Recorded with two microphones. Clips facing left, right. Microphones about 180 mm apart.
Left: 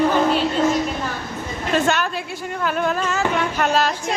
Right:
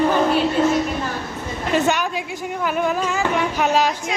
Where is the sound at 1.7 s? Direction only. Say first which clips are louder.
Even; 15° right (ahead or behind).